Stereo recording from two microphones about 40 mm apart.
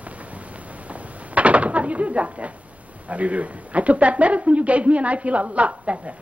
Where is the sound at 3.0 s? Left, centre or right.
Right.